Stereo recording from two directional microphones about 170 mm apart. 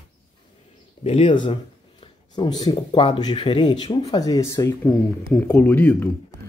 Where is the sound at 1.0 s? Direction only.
30° left (ahead or behind); by 6.0 s 10° left (ahead or behind).